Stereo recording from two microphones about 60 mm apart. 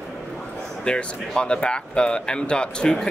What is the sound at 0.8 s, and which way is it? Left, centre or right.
Speech, centre.